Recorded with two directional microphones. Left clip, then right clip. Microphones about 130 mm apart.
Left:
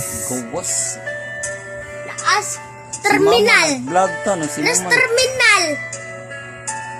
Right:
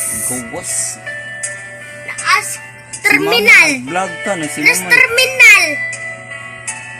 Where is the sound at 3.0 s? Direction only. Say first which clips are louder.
Right 2 dB; 45° left (ahead or behind).